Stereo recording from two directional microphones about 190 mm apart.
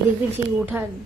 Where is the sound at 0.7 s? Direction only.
10° right (ahead or behind).